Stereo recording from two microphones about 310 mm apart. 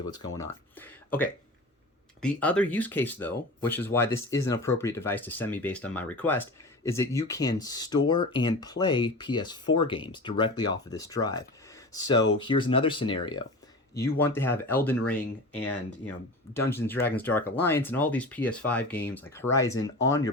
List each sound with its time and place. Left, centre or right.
0.1 s speech: centre
15.1 s speech: left
16.6 s speech: centre